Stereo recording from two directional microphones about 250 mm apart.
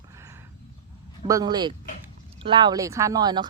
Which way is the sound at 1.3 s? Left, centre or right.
Centre.